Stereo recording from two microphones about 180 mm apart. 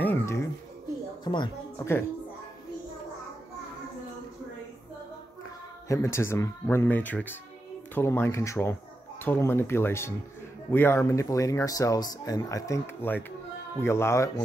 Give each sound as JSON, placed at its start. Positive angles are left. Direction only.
{"t": 0.0, "sound": "cat", "side_deg": 10}
{"t": 1.2, "sound": "speech", "side_deg": 25}
{"t": 1.8, "sound": "speech", "side_deg": 15}
{"t": 5.9, "sound": "speech", "side_deg": 15}